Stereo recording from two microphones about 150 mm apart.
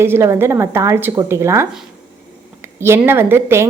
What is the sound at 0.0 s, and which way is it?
A woman's voice, 15° right (ahead or behind).